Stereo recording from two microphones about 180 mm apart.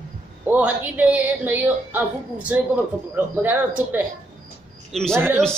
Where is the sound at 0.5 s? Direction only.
10° right (ahead or behind).